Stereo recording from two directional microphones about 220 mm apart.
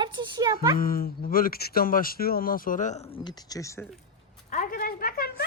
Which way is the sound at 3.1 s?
20° left (ahead or behind).